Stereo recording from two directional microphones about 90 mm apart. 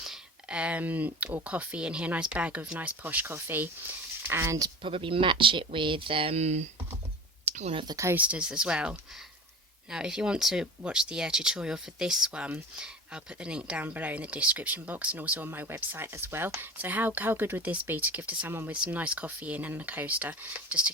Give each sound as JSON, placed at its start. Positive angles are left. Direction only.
{"t": 0.0, "sound": "speech", "side_deg": -10}
{"t": 4.8, "sound": "speech", "side_deg": -80}
{"t": 7.9, "sound": "speech", "side_deg": -35}
{"t": 8.1, "sound": "speech", "side_deg": -15}